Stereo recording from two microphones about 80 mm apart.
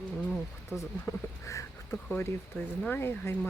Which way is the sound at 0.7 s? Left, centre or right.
Left.